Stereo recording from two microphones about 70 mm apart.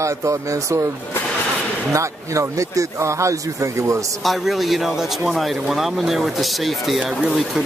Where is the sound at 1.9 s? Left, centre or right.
Right.